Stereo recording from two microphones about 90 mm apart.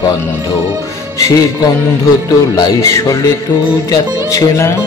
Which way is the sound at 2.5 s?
35° left (ahead or behind).